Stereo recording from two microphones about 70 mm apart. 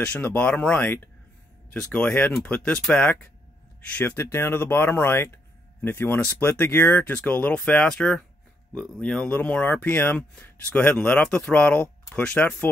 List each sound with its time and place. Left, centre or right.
0.0 s speech: left
1.7 s speech: centre
3.9 s speech: left; by 9.3 s centre
9.3 s speech: left